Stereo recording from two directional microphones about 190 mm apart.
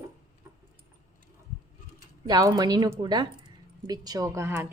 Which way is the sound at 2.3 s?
20° right (ahead or behind).